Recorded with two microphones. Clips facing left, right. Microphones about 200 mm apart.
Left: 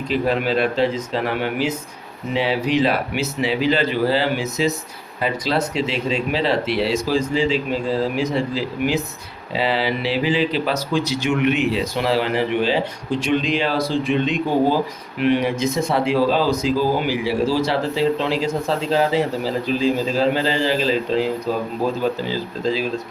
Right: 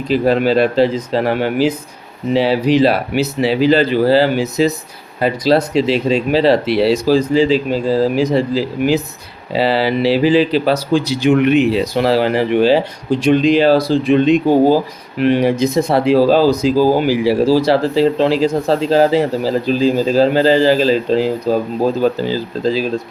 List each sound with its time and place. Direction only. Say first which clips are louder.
0.1 s speech: right 7 dB; 35° right (ahead or behind)